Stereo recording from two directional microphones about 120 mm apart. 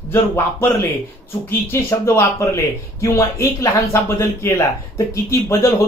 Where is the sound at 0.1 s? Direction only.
20° left (ahead or behind).